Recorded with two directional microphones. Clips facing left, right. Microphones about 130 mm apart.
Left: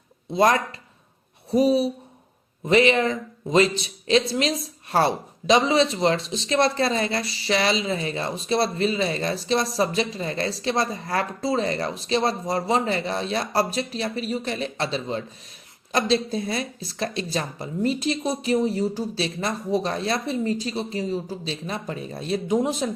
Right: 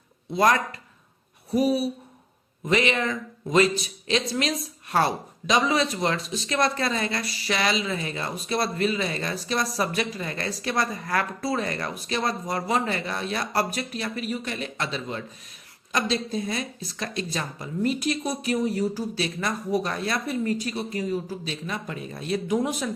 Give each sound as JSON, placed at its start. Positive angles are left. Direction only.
{"t": 0.3, "sound": "speech", "side_deg": 25}